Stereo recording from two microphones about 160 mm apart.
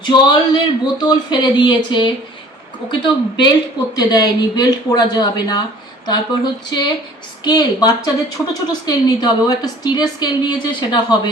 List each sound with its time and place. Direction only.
0.0 s speech: 30° left (ahead or behind)